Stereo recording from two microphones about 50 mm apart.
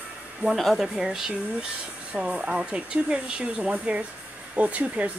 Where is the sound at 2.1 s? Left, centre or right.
Centre.